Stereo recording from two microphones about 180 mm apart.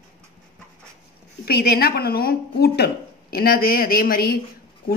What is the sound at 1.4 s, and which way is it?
A woman's voice, 60° left (ahead or behind).